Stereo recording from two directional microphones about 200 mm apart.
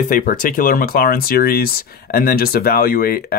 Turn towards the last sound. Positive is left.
turn(degrees=50)  # may be behind; listen again after turning